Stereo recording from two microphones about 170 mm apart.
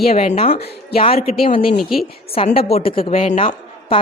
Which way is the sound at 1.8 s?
Centre (ahead or behind).